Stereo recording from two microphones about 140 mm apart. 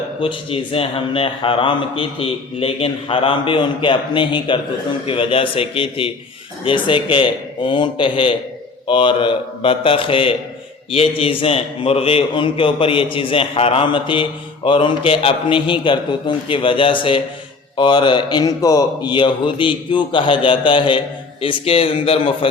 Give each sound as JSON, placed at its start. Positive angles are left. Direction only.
{"t": 0.2, "sound": "a man's voice", "side_deg": 40}